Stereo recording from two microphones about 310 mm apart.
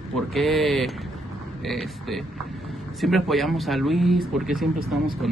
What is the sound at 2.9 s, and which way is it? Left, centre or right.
Speech, centre.